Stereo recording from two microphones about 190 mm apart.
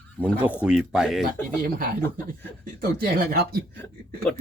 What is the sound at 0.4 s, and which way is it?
Speech, 5° right (ahead or behind).